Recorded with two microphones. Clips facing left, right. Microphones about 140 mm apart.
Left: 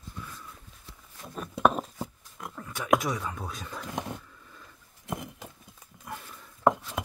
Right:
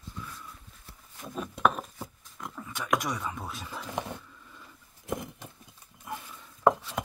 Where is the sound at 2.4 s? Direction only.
Centre (ahead or behind).